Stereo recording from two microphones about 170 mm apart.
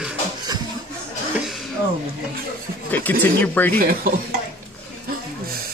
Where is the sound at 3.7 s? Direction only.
60° right (ahead or behind).